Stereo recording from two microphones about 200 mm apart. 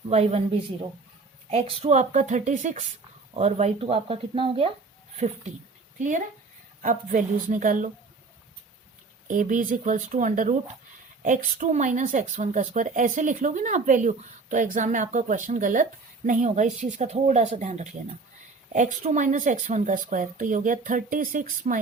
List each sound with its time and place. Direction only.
0.1 s speech: 30° right (ahead or behind)
6.0 s speech: 40° right (ahead or behind)
9.2 s speech: 40° right (ahead or behind)